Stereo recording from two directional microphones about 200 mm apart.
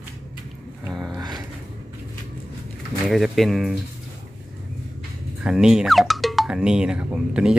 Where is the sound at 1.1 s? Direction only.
20° right (ahead or behind).